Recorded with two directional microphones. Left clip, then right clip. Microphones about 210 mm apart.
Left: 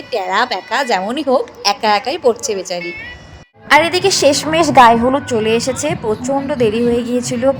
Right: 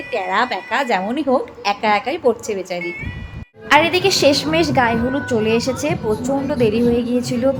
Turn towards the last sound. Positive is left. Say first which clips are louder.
# left 3 dB
turn(degrees=20)  # may be behind; listen again after turning